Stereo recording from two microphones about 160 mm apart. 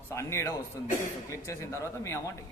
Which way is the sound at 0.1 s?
15° left (ahead or behind).